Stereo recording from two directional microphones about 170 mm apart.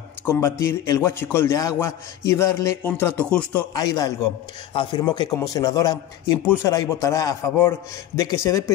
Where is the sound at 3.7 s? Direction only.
20° left (ahead or behind).